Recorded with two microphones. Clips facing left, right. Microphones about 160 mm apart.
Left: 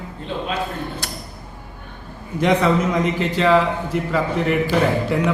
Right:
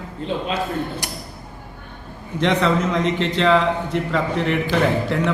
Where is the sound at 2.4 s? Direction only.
10° left (ahead or behind).